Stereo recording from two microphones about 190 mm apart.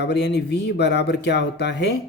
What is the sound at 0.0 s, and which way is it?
Speech, 60° left (ahead or behind).